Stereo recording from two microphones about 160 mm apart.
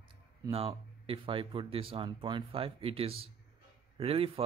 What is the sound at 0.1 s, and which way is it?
Speech, 35° right (ahead or behind).